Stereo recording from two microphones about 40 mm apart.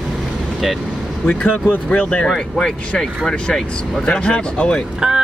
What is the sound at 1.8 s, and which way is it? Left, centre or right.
Speech, left.